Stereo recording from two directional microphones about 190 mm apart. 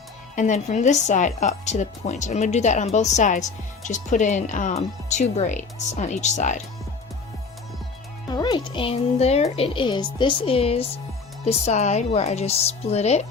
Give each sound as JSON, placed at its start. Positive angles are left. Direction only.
{"t": 0.3, "sound": "speech", "side_deg": 40}
{"t": 8.3, "sound": "speech", "side_deg": 20}